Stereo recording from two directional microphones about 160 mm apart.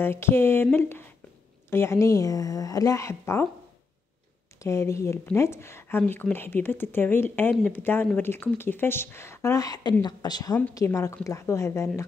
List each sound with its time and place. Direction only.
0.0 s a woman's voice: 15° left (ahead or behind)
4.6 s a woman's voice: 20° left (ahead or behind)